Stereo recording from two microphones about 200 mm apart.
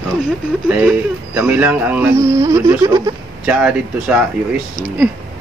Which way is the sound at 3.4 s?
5° right (ahead or behind).